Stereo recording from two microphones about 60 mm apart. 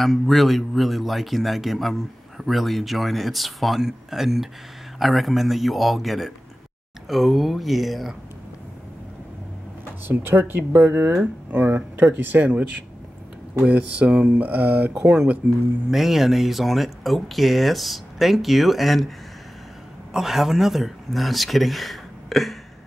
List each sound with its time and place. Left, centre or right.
0.0 s speech: centre
10.0 s speech: right
15.9 s speech: centre